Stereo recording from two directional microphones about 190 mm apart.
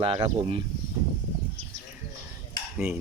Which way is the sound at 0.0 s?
30° right (ahead or behind).